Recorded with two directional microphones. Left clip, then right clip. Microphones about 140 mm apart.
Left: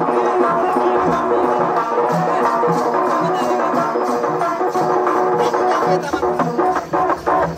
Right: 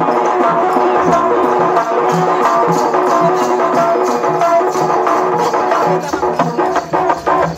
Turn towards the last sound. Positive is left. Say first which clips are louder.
# right 3 dB
turn(degrees=-30)  # may be behind; listen again after turning